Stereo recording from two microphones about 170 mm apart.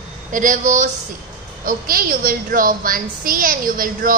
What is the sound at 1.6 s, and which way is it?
A woman's voice, 60° right (ahead or behind).